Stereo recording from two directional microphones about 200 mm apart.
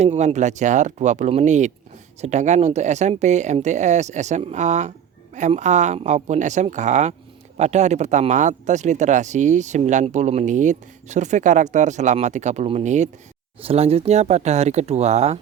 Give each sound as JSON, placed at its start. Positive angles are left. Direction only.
{"t": 0.0, "sound": "speech", "side_deg": -35}